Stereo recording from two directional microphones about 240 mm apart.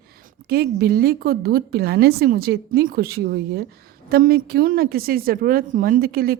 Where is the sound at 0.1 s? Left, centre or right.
Right.